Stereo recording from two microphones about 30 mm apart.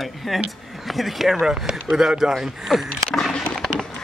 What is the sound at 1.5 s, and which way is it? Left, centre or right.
A man's voice, centre.